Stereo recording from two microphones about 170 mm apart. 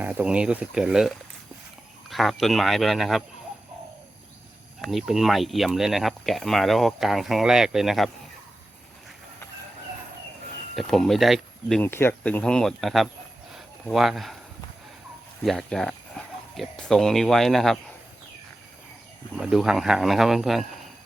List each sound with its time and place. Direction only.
0.0 s speech: 10° right (ahead or behind)
4.8 s speech: centre (ahead or behind)
10.8 s speech: centre (ahead or behind)
11.8 s speech: 15° left (ahead or behind)
15.4 s speech: centre (ahead or behind)
19.4 s speech: 5° right (ahead or behind)